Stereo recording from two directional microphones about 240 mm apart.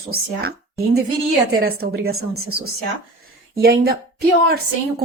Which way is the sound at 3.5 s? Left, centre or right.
Right.